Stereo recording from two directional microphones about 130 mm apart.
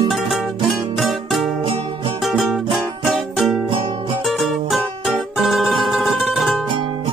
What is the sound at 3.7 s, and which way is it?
Music, 45° right (ahead or behind).